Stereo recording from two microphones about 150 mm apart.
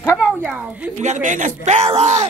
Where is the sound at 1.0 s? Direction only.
55° right (ahead or behind).